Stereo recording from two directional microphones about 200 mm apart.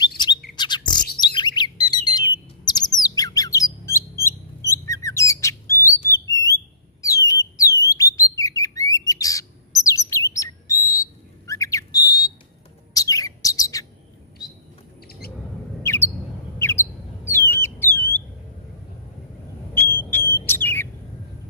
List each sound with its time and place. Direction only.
0.6 s bird: 20° left (ahead or behind)
3.0 s squawk: 20° left (ahead or behind)
4.6 s bird: 15° left (ahead or behind)
6.3 s alarm: 15° left (ahead or behind)
8.9 s bird: 15° left (ahead or behind)
14.4 s a sound: 20° left (ahead or behind)
15.8 s bird: 10° left (ahead or behind)
19.7 s a sound: 10° left (ahead or behind)
20.1 s bird: 10° left (ahead or behind)